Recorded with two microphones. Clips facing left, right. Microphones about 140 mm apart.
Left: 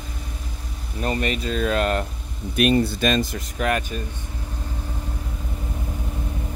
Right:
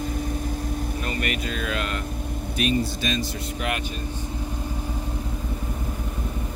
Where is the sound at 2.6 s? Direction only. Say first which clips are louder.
Left 6 dB; 65° left (ahead or behind).